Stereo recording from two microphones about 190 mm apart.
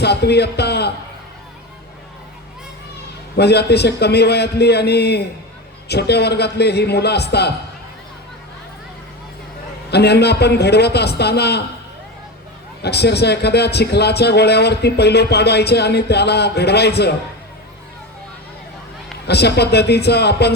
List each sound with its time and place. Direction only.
0.0 s a man's voice: 60° left (ahead or behind)
3.3 s speech: 60° left (ahead or behind)
9.9 s speech: 60° left (ahead or behind)
12.8 s speech: 60° left (ahead or behind)
19.3 s speech: 60° left (ahead or behind)